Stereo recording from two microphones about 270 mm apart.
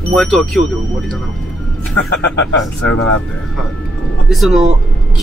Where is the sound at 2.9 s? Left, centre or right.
Left.